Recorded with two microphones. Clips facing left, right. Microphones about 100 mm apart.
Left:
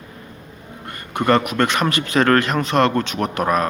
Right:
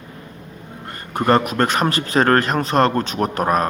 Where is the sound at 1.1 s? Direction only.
35° right (ahead or behind).